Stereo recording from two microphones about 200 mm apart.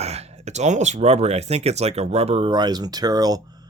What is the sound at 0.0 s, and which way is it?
Speech, 30° right (ahead or behind).